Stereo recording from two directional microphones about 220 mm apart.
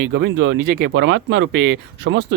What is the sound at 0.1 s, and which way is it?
Speech, 55° right (ahead or behind).